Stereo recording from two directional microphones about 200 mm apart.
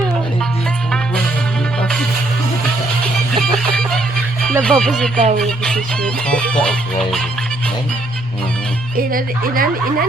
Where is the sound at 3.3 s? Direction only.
Centre (ahead or behind).